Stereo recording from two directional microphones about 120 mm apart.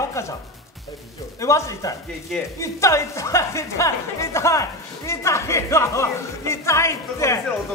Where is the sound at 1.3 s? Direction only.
25° left (ahead or behind).